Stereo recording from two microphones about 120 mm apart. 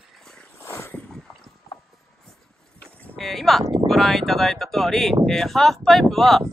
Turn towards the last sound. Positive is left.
turn(degrees=0)  # may be behind; listen again after turning